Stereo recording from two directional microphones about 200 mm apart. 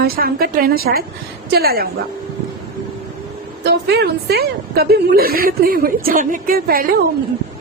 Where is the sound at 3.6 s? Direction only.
55° right (ahead or behind).